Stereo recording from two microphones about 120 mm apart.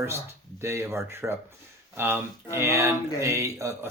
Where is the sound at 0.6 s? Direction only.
20° right (ahead or behind).